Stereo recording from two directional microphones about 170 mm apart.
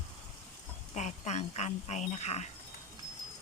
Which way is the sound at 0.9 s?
45° left (ahead or behind).